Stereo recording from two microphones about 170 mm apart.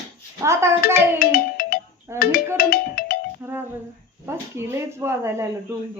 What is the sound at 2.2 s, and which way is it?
Speech, 60° left (ahead or behind).